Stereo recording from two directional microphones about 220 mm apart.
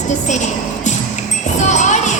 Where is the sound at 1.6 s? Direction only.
35° left (ahead or behind).